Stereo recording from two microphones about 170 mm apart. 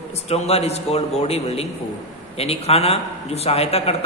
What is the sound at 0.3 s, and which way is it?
A man's voice, 40° left (ahead or behind).